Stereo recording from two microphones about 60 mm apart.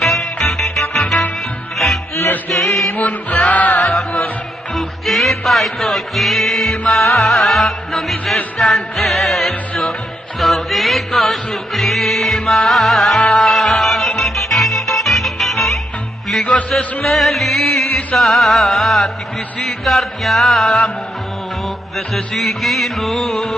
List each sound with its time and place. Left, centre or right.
0.0 s music: centre
2.7 s music: centre
3.0 s music: left
3.8 s music: centre
17.0 s music: centre
21.9 s music: centre